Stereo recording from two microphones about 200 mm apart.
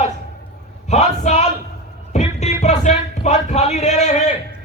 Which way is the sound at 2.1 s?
35° left (ahead or behind).